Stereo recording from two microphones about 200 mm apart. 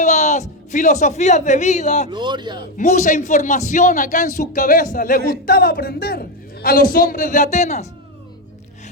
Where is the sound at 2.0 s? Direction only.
20° right (ahead or behind).